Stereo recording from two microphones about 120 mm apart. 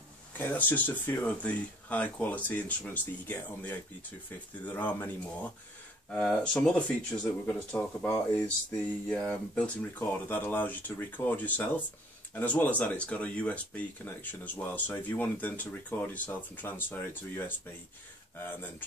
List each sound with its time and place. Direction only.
0.4 s speech: 15° left (ahead or behind)